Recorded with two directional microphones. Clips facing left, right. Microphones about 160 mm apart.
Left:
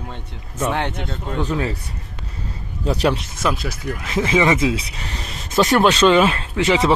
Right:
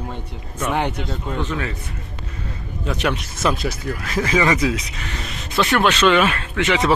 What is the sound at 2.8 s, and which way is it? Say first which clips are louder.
Speech: left 4 dB; 35° left (ahead or behind).